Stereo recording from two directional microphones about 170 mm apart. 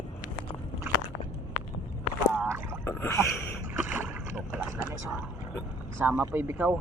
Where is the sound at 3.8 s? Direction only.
10° right (ahead or behind).